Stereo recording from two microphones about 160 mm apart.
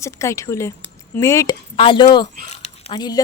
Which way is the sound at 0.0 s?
20° left (ahead or behind).